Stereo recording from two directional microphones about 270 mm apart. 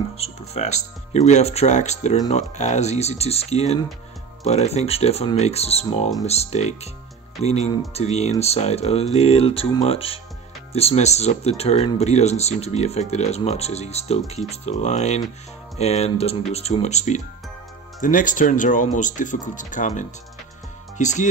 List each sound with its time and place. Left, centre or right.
0.2 s speech: left